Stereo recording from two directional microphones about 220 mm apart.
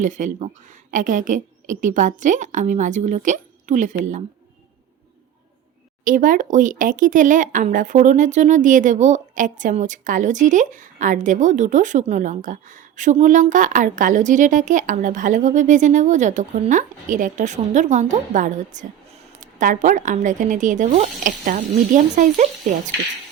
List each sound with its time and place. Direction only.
0.0 s speech: 35° right (ahead or behind)
6.1 s speech: 40° right (ahead or behind)